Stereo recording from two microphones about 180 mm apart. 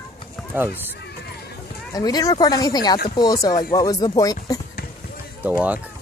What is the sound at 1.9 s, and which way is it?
Speech, 20° left (ahead or behind).